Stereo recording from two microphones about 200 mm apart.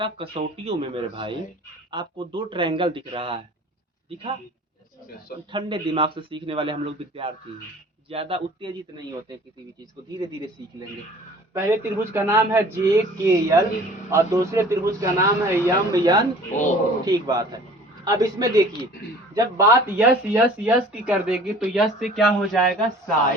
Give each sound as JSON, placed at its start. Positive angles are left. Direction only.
{"t": 0.0, "sound": "speech", "side_deg": -30}
{"t": 5.5, "sound": "speech", "side_deg": -25}
{"t": 11.5, "sound": "speech", "side_deg": -10}